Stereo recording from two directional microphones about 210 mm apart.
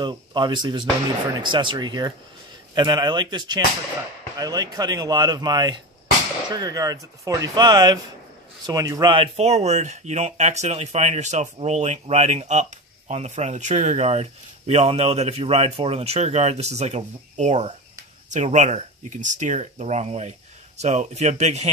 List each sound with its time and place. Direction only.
0.0 s speech: 20° right (ahead or behind)